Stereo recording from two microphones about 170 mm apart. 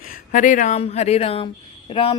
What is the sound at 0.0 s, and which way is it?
Speech, 50° left (ahead or behind).